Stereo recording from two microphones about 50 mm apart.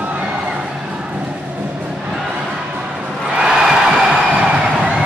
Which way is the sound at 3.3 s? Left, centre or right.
Centre.